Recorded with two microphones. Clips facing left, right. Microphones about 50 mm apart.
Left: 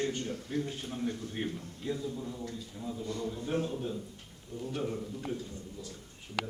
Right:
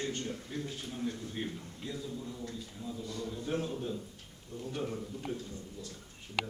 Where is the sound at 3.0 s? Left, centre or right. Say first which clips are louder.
Left 4 dB; left.